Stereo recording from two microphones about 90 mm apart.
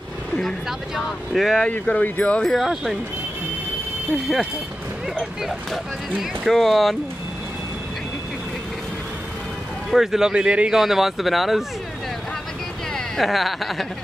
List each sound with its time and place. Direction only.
0.7 s speech: centre (ahead or behind)
1.7 s speech: 15° left (ahead or behind)
2.4 s speech: centre (ahead or behind)
5.4 s speech: centre (ahead or behind)
9.8 s speech: 5° right (ahead or behind)
12.9 s speech: 5° left (ahead or behind)